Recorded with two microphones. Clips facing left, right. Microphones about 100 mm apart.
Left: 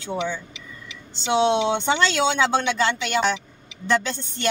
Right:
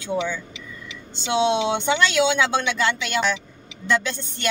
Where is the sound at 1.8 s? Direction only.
35° left (ahead or behind).